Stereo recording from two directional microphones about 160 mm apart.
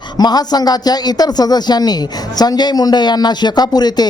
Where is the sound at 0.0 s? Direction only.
25° left (ahead or behind).